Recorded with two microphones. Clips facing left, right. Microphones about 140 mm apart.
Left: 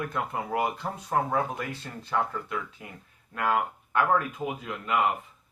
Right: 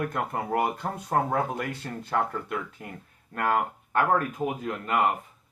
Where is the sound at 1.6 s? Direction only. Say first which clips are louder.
Right 3 dB; 55° right (ahead or behind).